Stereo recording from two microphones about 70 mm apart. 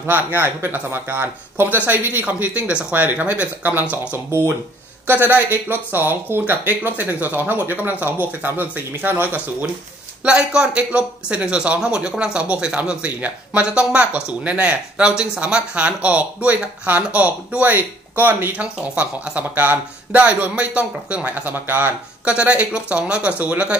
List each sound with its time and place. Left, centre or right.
0.0 s speech: right
10.2 s speech: centre